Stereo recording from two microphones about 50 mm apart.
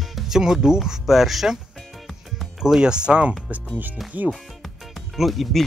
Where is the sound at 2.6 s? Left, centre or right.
Centre.